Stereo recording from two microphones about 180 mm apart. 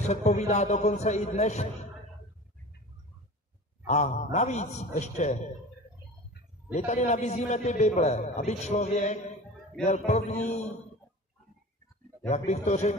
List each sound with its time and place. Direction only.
0.0 s a man's voice: 40° left (ahead or behind)
3.8 s a man's voice: 40° left (ahead or behind)
6.9 s a man's voice: 40° left (ahead or behind)
12.3 s a man's voice: 40° left (ahead or behind)